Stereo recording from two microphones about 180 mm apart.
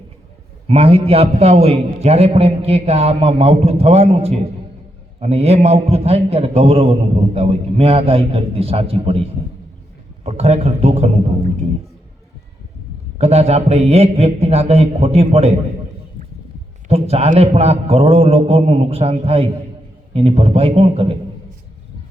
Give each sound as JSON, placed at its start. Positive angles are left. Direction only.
{"t": 0.7, "sound": "a man's voice", "side_deg": -35}
{"t": 13.1, "sound": "a man's voice", "side_deg": -35}
{"t": 16.9, "sound": "a man's voice", "side_deg": -35}